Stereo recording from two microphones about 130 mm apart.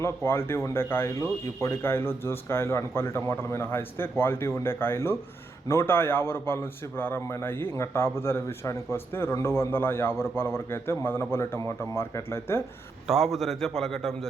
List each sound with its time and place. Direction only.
0.0 s a man's voice: 20° left (ahead or behind)
13.1 s a man's voice: centre (ahead or behind)